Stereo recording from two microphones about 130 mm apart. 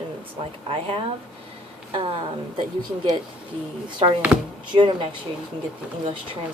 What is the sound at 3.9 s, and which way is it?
Speech, 35° right (ahead or behind).